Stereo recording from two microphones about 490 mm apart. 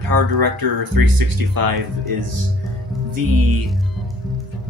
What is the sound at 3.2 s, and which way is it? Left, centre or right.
Speech, right.